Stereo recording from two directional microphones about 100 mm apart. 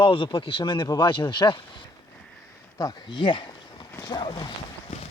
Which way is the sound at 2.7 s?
40° left (ahead or behind).